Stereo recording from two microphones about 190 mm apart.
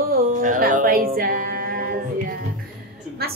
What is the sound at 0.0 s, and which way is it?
Music, 45° right (ahead or behind).